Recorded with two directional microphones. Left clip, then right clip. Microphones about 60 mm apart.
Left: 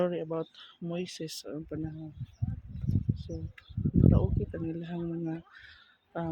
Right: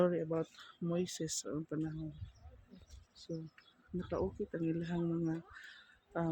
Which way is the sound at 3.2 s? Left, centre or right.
Centre.